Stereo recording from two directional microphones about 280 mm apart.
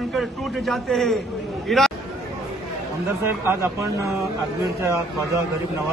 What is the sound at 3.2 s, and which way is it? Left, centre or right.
Speech, centre.